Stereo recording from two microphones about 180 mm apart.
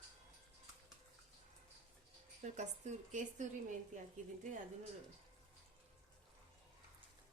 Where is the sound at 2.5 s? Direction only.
40° right (ahead or behind).